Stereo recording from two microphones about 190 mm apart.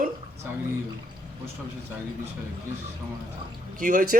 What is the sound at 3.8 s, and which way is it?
Speech, 45° right (ahead or behind).